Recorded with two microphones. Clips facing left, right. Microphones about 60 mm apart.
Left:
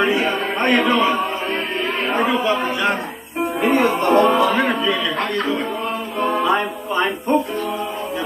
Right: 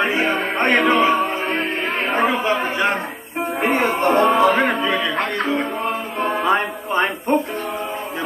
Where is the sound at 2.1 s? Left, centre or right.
Right.